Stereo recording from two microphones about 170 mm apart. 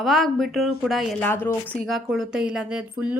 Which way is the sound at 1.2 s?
15° left (ahead or behind).